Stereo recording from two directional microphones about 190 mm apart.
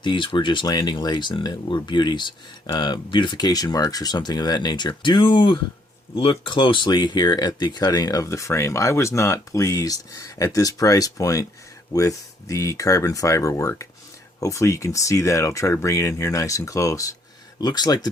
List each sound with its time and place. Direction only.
0.0 s speech: 25° left (ahead or behind)